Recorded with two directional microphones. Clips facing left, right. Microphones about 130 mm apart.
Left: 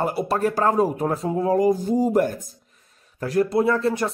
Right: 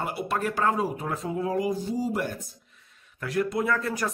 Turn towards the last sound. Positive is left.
turn(degrees=25)  # may be behind; listen again after turning